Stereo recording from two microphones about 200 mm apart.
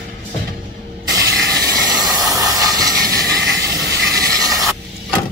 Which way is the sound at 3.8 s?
50° right (ahead or behind).